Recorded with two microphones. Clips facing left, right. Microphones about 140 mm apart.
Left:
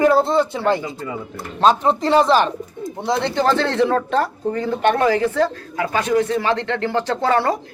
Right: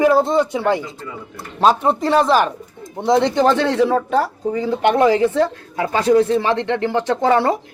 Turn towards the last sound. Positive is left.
turn(degrees=-20)  # may be behind; listen again after turning